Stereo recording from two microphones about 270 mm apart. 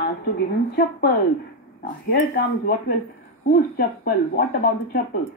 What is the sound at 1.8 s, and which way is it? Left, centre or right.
Speech, left.